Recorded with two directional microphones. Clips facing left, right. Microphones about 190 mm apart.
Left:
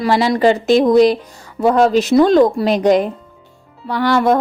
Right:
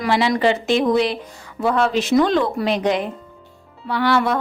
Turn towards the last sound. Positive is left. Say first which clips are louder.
# left 4 dB
turn(degrees=45)  # may be behind; listen again after turning